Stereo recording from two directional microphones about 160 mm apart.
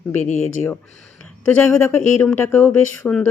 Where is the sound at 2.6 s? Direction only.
5° left (ahead or behind).